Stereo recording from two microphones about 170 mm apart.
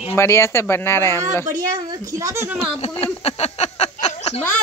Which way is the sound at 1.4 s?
20° right (ahead or behind).